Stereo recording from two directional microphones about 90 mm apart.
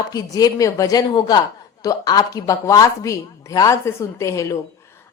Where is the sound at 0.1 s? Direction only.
45° left (ahead or behind).